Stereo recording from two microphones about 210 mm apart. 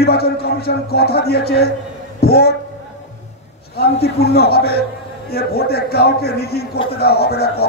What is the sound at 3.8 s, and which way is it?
A man's voice, 50° left (ahead or behind).